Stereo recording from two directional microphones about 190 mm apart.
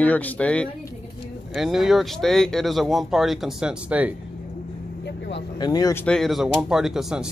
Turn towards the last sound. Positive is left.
turn(degrees=0)  # may be behind; listen again after turning